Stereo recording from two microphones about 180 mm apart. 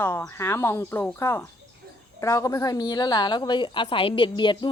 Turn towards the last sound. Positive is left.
turn(degrees=25)  # may be behind; listen again after turning